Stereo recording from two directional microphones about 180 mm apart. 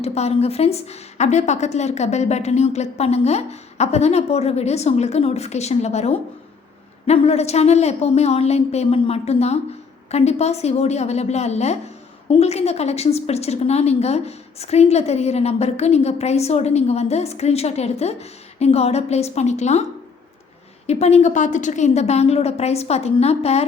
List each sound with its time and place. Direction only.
0.0 s a woman's voice: 35° left (ahead or behind)
20.8 s a woman's voice: 35° left (ahead or behind)